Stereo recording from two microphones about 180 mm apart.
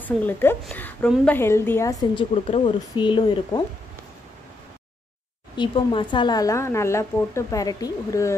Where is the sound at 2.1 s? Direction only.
30° left (ahead or behind).